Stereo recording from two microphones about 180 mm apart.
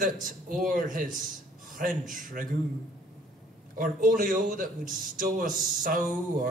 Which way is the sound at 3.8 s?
50° right (ahead or behind).